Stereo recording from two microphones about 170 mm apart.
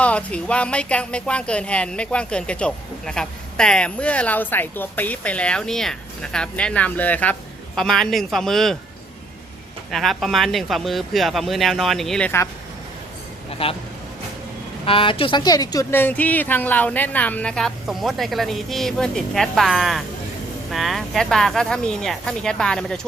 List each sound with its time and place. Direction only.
0.0 s speech: 10° left (ahead or behind)
9.9 s speech: centre (ahead or behind)
13.5 s speech: 35° left (ahead or behind)
14.8 s speech: 30° left (ahead or behind); by 23.0 s 5° left (ahead or behind)